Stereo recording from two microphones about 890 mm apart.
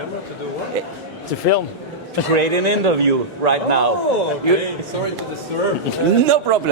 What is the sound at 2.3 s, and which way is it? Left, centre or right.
A man's voice, right.